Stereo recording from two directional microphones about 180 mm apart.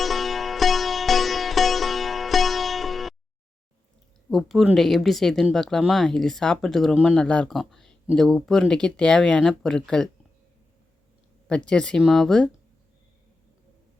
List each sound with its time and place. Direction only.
0.0 s music: centre (ahead or behind)
4.3 s speech: centre (ahead or behind)
11.4 s speech: 5° left (ahead or behind)